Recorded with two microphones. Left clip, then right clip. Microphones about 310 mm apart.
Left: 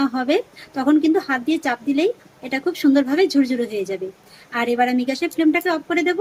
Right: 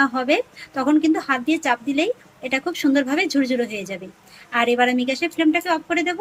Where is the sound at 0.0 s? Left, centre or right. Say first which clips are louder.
Right 1 dB; centre.